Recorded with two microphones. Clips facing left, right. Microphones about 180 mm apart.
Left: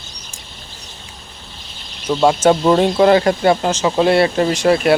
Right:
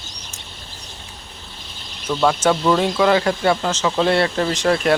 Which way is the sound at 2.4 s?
35° left (ahead or behind).